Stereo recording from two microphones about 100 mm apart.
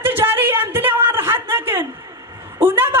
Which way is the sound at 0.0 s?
20° right (ahead or behind).